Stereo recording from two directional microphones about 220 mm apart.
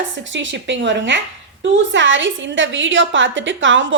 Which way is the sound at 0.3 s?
55° right (ahead or behind).